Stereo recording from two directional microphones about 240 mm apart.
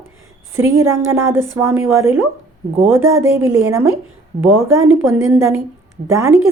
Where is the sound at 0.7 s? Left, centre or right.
Centre.